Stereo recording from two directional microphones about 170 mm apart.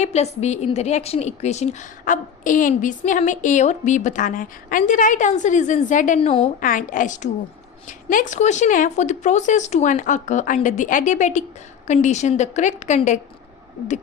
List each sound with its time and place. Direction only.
0.0 s a woman's voice: 40° left (ahead or behind)
6.1 s a woman's voice: 35° left (ahead or behind)